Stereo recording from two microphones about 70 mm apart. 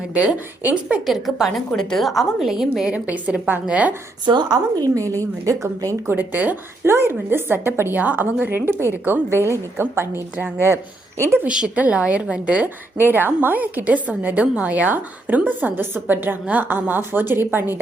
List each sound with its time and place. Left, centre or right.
0.7 s a woman's voice: centre
1.0 s a woman's voice: centre
2.9 s a woman's voice: centre
4.4 s a woman's voice: right
5.5 s speech: right
6.1 s a woman's voice: right
6.8 s a woman's voice: right
11.4 s a woman's voice: centre
13.0 s a woman's voice: right